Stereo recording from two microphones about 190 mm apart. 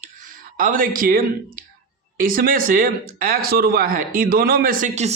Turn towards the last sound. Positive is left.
turn(degrees=-40)  # may be behind; listen again after turning